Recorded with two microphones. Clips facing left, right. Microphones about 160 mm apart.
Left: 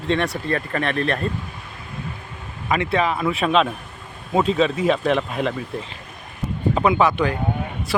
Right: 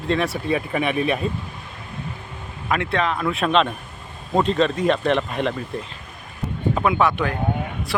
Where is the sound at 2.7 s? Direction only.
Centre (ahead or behind).